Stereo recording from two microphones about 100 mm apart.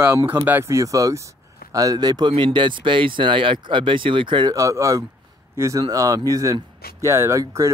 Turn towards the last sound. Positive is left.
turn(degrees=-30)  # may be behind; listen again after turning